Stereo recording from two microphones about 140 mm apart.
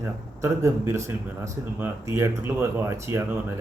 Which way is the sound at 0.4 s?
20° right (ahead or behind).